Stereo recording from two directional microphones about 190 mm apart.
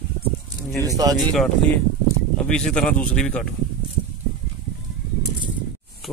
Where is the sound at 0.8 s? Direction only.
20° right (ahead or behind).